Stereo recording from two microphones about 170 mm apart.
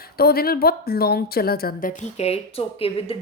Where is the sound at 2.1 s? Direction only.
40° left (ahead or behind).